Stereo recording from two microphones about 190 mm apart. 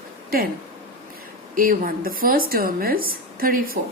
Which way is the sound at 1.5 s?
50° right (ahead or behind).